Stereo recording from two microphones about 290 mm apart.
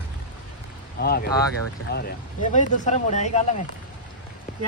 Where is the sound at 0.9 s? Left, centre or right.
Left.